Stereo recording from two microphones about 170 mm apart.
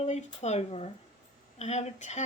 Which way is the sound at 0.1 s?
40° left (ahead or behind).